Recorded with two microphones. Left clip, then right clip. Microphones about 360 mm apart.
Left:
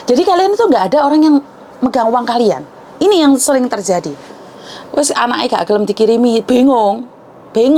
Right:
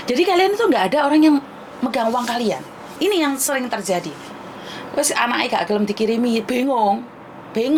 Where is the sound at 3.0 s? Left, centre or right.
Left.